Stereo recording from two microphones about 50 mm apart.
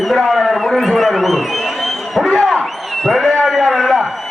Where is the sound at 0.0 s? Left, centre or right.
Centre.